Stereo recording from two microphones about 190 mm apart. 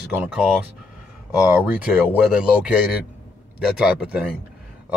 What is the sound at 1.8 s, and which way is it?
Speech, 5° right (ahead or behind).